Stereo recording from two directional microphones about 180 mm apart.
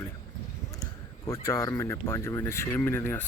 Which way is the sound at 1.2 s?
15° left (ahead or behind).